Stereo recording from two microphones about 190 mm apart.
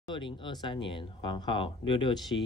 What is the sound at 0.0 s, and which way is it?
Speech, 25° left (ahead or behind).